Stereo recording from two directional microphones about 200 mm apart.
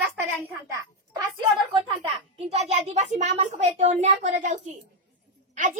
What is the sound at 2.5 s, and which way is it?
A child's voice, 35° right (ahead or behind).